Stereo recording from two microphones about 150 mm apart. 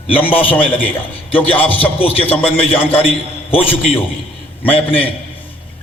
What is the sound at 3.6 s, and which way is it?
Speech, 40° left (ahead or behind).